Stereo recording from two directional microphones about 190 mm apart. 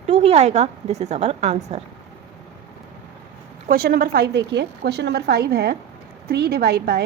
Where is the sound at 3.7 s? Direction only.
50° right (ahead or behind).